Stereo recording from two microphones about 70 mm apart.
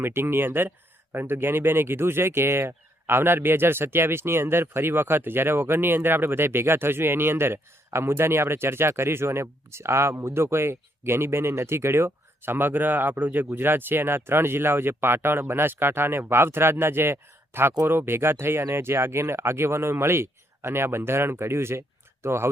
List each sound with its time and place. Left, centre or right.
0.0 s speech: right